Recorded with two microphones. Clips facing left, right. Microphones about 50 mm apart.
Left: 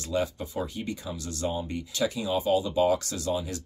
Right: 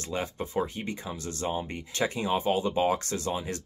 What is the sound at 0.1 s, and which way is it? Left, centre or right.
Speech, right.